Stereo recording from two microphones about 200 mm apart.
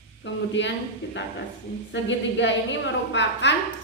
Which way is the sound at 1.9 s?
65° left (ahead or behind).